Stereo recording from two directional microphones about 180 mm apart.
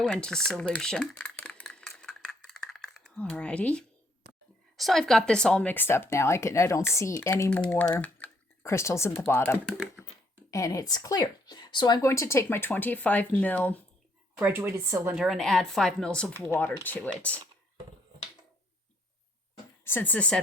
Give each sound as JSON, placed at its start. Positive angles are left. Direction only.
{"t": 0.0, "sound": "a sound", "side_deg": 5}
{"t": 4.8, "sound": "speech", "side_deg": 0}
{"t": 8.0, "sound": "typing", "side_deg": 10}
{"t": 9.2, "sound": "speech", "side_deg": 10}
{"t": 9.6, "sound": "speech", "side_deg": 0}
{"t": 10.5, "sound": "speech", "side_deg": 20}
{"t": 14.3, "sound": "speech", "side_deg": -10}
{"t": 15.1, "sound": "speech", "side_deg": 0}
{"t": 19.8, "sound": "speech", "side_deg": 10}